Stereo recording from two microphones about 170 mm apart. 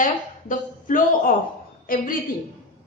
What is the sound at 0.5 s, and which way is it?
Speech, 50° left (ahead or behind).